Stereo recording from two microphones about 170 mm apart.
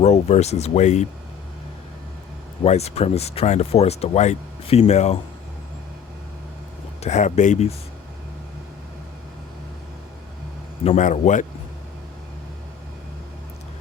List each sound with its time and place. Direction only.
0.0 s speech: 40° left (ahead or behind)
2.6 s speech: 40° left (ahead or behind)
7.0 s speech: 45° left (ahead or behind)
10.8 s speech: 45° left (ahead or behind)